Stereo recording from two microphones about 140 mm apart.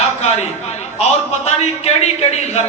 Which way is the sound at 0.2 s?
50° left (ahead or behind).